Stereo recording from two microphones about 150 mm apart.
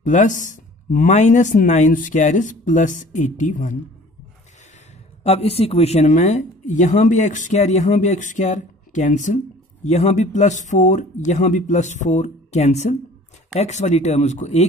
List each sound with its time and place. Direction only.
0.0 s speech: 55° left (ahead or behind)
5.2 s a woman's voice: 45° left (ahead or behind)